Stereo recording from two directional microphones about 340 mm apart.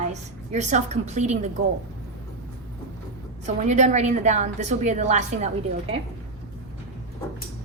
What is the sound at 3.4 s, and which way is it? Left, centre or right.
A woman's voice, right.